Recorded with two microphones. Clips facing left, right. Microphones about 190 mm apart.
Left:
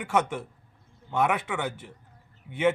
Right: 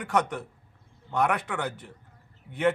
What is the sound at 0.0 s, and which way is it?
A man's voice, 5° left (ahead or behind).